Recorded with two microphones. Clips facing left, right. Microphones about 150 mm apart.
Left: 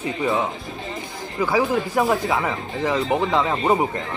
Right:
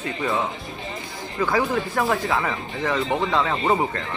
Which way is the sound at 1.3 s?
10° left (ahead or behind).